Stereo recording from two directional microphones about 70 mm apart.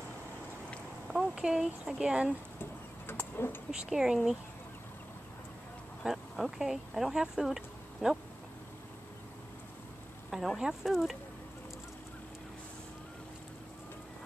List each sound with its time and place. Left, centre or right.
1.0 s speech: centre
2.6 s a sound: left
3.7 s speech: centre
6.0 s speech: centre
10.3 s speech: centre